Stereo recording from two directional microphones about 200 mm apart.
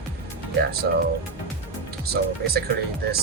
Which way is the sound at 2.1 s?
50° right (ahead or behind).